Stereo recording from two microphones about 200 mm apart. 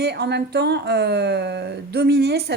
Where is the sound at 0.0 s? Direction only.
55° right (ahead or behind).